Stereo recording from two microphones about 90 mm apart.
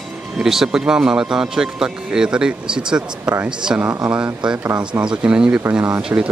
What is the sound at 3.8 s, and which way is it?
Speech, 30° right (ahead or behind).